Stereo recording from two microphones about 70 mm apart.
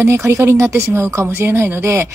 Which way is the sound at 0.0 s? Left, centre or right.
Right.